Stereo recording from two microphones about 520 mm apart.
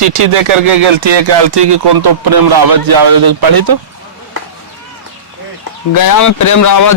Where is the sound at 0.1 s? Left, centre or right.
Right.